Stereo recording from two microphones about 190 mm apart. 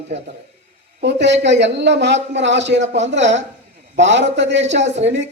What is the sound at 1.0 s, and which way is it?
Speech, 65° right (ahead or behind).